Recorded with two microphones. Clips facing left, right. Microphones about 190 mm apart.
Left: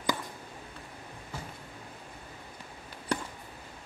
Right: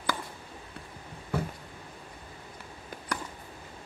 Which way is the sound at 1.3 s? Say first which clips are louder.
Right 11 dB; 60° right (ahead or behind).